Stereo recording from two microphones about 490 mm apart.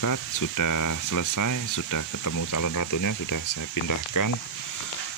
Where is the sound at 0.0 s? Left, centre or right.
Left.